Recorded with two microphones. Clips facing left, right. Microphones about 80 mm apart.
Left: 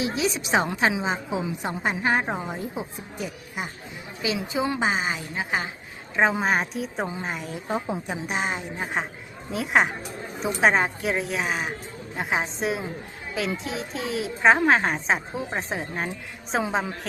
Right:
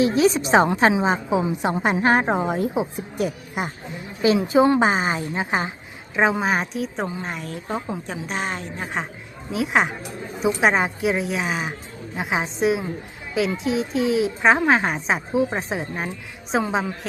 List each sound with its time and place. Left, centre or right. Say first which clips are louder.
0.0 s a woman's voice: right 8 dB; right
4.2 s a woman's voice: right 10 dB; right
5.3 s a woman's voice: right 4 dB; right
6.1 s a child's voice: right 2 dB; centre
8.4 s a child's voice: right 1 dB; centre